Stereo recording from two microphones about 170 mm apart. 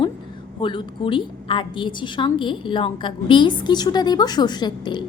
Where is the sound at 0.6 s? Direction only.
30° left (ahead or behind).